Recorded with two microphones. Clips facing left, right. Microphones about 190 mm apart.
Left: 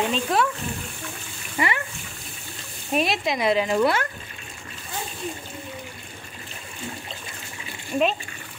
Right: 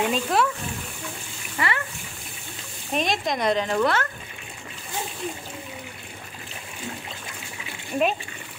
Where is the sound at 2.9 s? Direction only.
5° left (ahead or behind).